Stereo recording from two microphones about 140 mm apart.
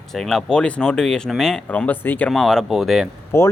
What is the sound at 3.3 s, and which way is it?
Speech, 20° left (ahead or behind).